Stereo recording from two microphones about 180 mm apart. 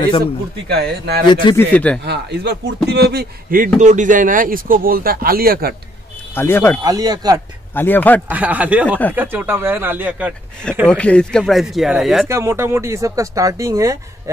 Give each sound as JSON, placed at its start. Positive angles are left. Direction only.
{"t": 0.2, "sound": "speech", "side_deg": -60}
{"t": 1.2, "sound": "speech", "side_deg": 25}
{"t": 1.7, "sound": "speech", "side_deg": 5}
{"t": 2.0, "sound": "a man's voice", "side_deg": -70}
{"t": 6.3, "sound": "speech", "side_deg": 10}
{"t": 6.8, "sound": "speech", "side_deg": -20}
{"t": 7.7, "sound": "speech", "side_deg": 10}
{"t": 8.3, "sound": "speech", "side_deg": -10}
{"t": 8.8, "sound": "speech", "side_deg": 10}
{"t": 9.1, "sound": "speech", "side_deg": -10}
{"t": 10.9, "sound": "speech", "side_deg": 5}
{"t": 12.3, "sound": "speech", "side_deg": -15}